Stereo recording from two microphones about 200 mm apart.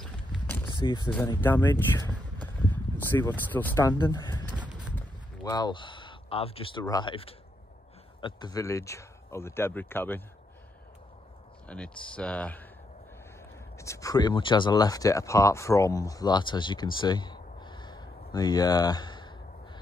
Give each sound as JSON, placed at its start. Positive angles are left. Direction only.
{"t": 0.0, "sound": "a sound", "side_deg": 5}
{"t": 0.8, "sound": "speech", "side_deg": 20}
{"t": 4.0, "sound": "speech", "side_deg": 20}
{"t": 4.6, "sound": "a sound", "side_deg": -5}
{"t": 5.4, "sound": "speech", "side_deg": 20}
{"t": 11.6, "sound": "speech", "side_deg": 5}
{"t": 13.7, "sound": "speech", "side_deg": 15}